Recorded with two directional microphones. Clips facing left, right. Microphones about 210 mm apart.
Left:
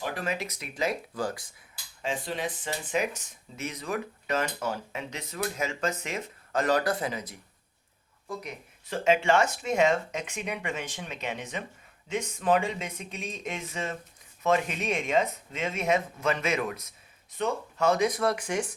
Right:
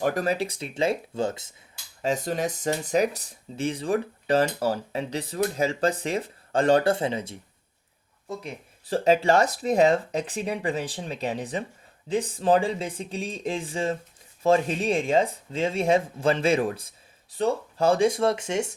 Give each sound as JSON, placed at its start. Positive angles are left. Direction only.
{"t": 0.0, "sound": "speech", "side_deg": -40}
{"t": 2.0, "sound": "speech", "side_deg": -40}